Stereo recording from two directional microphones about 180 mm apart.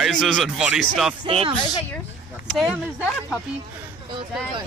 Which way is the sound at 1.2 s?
30° right (ahead or behind).